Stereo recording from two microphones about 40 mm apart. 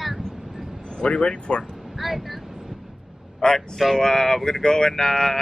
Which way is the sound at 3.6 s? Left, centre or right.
Centre.